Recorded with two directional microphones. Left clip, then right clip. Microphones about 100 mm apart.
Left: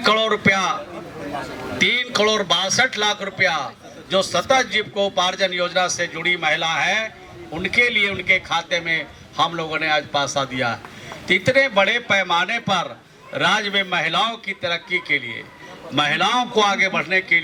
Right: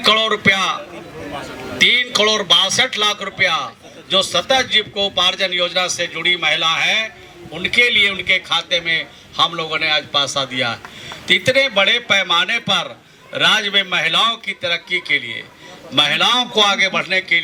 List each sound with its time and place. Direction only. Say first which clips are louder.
0.0 s a man's voice: right 3 dB; 20° right (ahead or behind)
1.8 s a man's voice: right 5 dB; 20° right (ahead or behind)